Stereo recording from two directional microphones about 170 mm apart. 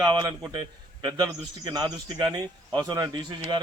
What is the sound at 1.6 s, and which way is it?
A man's voice, 25° right (ahead or behind).